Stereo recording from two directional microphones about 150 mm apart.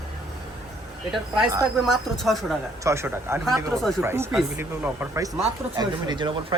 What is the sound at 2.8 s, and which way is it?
Speech, 20° right (ahead or behind).